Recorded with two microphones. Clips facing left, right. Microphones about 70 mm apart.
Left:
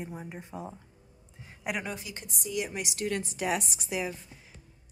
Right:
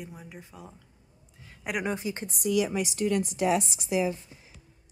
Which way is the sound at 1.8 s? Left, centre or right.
Right.